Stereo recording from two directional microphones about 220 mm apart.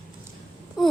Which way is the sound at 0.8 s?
Centre (ahead or behind).